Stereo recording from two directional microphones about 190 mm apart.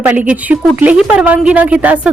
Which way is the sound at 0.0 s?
10° right (ahead or behind).